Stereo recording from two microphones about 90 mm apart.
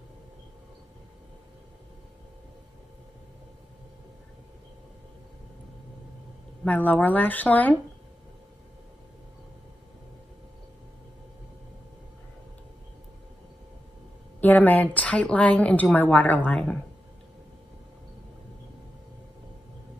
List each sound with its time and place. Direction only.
6.6 s a woman's voice: 20° left (ahead or behind)
14.4 s a woman's voice: 20° left (ahead or behind)